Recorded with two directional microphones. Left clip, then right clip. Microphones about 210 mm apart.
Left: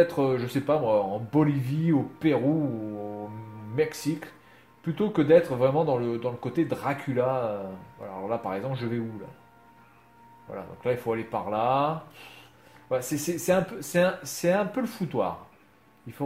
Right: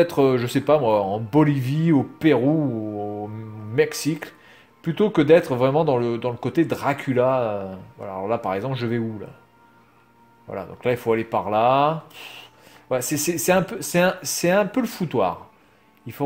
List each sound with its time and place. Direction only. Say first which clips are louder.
0.0 s speech: right 5 dB; 45° right (ahead or behind)
3.7 s speech: right 6 dB; 50° right (ahead or behind)
10.5 s speech: right 5 dB; 50° right (ahead or behind)